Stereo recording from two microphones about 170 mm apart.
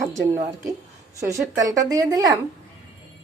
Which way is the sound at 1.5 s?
20° right (ahead or behind).